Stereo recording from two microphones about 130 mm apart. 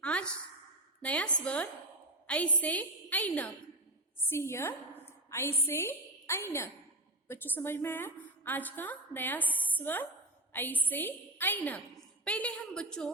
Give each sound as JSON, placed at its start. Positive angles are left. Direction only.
{"t": 0.0, "sound": "sigh", "side_deg": 10}
{"t": 1.0, "sound": "a woman's voice", "side_deg": 10}